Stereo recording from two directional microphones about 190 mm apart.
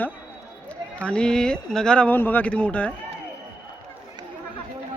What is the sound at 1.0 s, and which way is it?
Speech, 5° left (ahead or behind).